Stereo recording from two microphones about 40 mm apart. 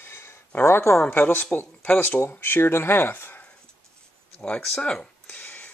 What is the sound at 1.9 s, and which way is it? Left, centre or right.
Speech, left.